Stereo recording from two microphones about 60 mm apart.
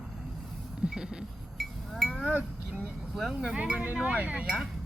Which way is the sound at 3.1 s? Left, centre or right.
Centre.